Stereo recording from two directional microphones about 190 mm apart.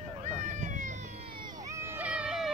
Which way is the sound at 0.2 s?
40° right (ahead or behind).